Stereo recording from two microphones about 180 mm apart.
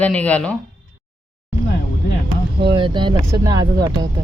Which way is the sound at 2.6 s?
25° right (ahead or behind).